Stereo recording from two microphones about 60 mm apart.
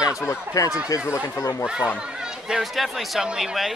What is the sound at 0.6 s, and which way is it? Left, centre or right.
Speech, left.